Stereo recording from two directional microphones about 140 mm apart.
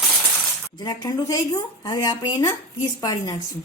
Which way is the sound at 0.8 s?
30° left (ahead or behind).